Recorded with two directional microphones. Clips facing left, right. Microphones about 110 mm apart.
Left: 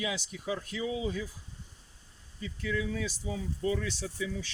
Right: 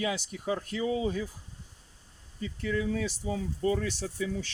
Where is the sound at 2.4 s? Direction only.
40° right (ahead or behind).